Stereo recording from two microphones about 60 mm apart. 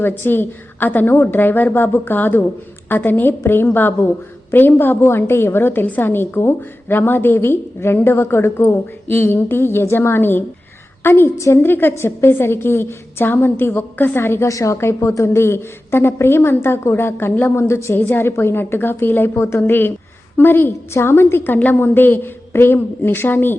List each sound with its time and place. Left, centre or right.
0.0 s a woman's voice: left
14.4 s a woman's voice: left
17.9 s a woman's voice: left
19.3 s a woman's voice: left